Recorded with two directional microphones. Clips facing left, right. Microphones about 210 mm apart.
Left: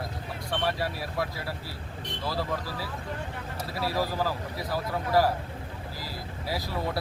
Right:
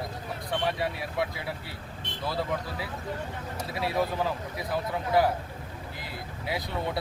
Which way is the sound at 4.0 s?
Centre (ahead or behind).